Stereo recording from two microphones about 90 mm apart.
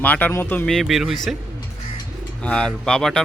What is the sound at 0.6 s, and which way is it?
Speech, centre (ahead or behind).